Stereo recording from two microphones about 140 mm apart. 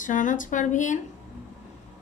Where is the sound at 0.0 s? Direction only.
65° left (ahead or behind).